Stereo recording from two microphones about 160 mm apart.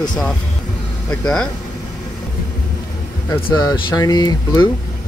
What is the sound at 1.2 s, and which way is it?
Speech, 5° left (ahead or behind).